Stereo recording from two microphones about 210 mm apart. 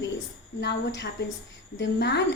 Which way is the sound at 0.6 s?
55° left (ahead or behind).